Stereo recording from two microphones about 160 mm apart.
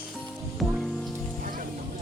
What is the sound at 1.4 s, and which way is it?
Music, 60° right (ahead or behind).